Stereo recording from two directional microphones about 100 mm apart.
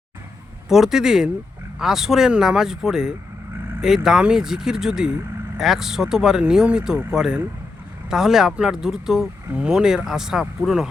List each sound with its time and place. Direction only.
0.7 s speech: 5° right (ahead or behind)